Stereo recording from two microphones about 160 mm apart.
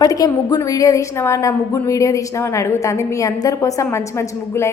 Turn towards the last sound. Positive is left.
turn(degrees=15)  # may be behind; listen again after turning